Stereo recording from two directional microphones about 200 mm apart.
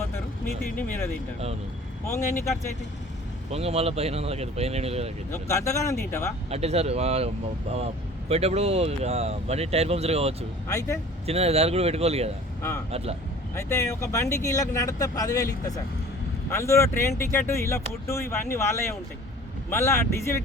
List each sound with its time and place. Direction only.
0.8 s speech: 10° left (ahead or behind)
3.5 s speech: 30° right (ahead or behind)
5.3 s speech: 15° left (ahead or behind)
6.5 s speech: 30° right (ahead or behind)
8.3 s speech: 30° right (ahead or behind)
10.7 s speech: 15° left (ahead or behind)
11.3 s speech: 30° right (ahead or behind)
13.6 s speech: 15° left (ahead or behind)